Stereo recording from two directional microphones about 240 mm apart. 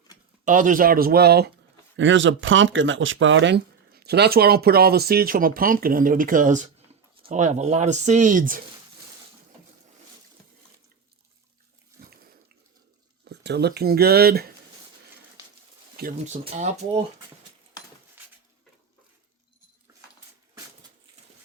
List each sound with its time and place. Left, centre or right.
0.4 s speech: right
12.0 s pig: right
13.2 s speech: right
16.0 s speech: right